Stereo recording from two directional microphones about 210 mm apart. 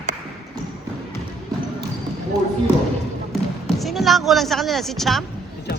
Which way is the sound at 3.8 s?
Centre (ahead or behind).